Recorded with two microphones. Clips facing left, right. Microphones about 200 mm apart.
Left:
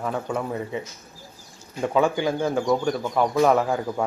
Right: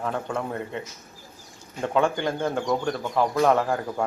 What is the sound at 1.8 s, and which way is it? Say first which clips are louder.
Speech: left 2 dB; 5° left (ahead or behind).